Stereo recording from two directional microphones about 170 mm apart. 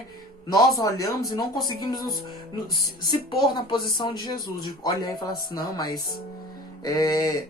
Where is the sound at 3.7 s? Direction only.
25° left (ahead or behind).